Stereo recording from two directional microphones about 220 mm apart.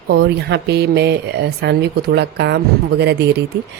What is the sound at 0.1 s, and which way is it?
Speech, 50° right (ahead or behind).